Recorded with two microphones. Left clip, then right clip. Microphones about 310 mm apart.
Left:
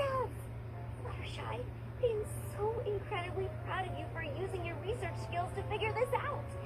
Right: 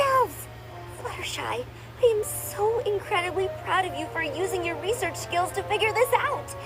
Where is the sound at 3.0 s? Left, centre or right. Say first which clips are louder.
Right 13 dB; right.